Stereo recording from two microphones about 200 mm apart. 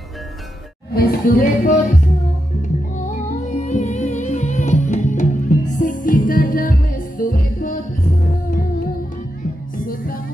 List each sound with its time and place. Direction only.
0.9 s speech: 45° left (ahead or behind)
3.1 s music: 35° left (ahead or behind)